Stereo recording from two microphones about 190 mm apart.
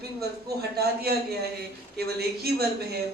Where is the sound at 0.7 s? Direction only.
55° right (ahead or behind).